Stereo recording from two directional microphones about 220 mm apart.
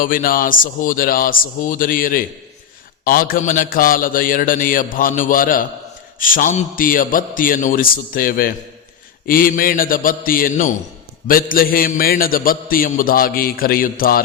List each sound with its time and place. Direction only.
0.0 s a man's voice: 40° left (ahead or behind)